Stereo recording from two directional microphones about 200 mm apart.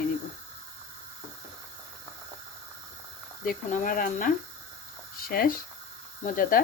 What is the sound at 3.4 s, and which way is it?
Speech, 45° left (ahead or behind).